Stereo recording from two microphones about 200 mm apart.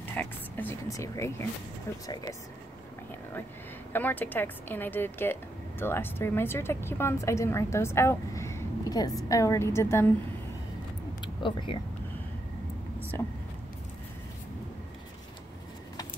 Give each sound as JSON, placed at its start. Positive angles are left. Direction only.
{"t": 0.0, "sound": "speech", "side_deg": 10}
{"t": 3.9, "sound": "speech", "side_deg": 10}
{"t": 11.1, "sound": "a sound", "side_deg": 25}